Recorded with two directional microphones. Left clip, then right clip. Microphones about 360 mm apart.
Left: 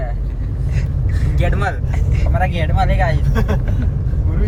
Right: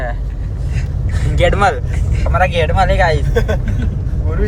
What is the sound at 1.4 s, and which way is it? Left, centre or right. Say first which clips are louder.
Speech: right 9 dB; centre.